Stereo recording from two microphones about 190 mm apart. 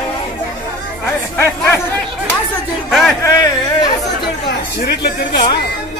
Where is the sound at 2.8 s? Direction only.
Centre (ahead or behind).